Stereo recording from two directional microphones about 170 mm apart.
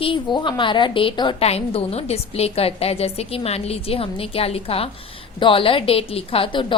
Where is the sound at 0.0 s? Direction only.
30° left (ahead or behind).